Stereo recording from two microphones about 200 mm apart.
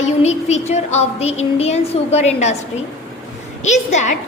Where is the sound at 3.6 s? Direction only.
35° left (ahead or behind).